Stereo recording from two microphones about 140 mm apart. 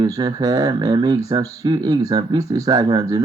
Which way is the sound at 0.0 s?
30° right (ahead or behind).